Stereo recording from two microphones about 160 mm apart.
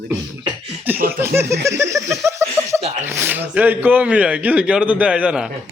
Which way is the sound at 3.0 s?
15° right (ahead or behind).